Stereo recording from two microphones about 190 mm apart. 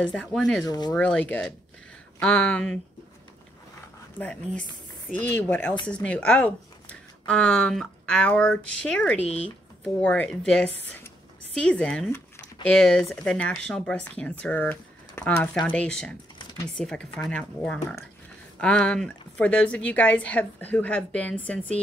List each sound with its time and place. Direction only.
0.0 s speech: 5° left (ahead or behind)
0.7 s speech: 20° left (ahead or behind)
0.9 s a woman's voice: 5° left (ahead or behind)
4.2 s a woman's voice: 5° left (ahead or behind)